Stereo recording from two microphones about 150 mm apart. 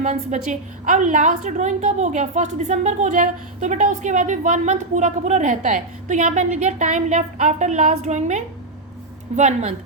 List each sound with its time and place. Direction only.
0.0 s a woman's voice: 50° right (ahead or behind)